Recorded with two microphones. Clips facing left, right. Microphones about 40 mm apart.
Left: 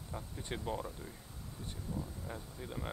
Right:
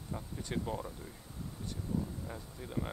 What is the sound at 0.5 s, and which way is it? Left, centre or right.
Speech, centre.